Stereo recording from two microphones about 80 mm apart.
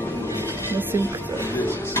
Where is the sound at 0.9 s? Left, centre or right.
Right.